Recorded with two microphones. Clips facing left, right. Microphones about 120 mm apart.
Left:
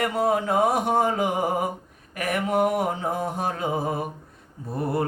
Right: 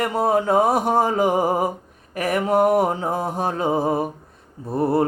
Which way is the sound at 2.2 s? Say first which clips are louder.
Right 4 dB; 30° right (ahead or behind).